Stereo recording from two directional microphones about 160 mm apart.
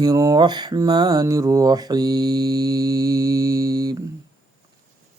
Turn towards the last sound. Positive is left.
turn(degrees=-25)  # may be behind; listen again after turning